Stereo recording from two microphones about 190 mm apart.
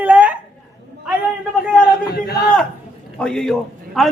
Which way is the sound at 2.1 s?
55° left (ahead or behind).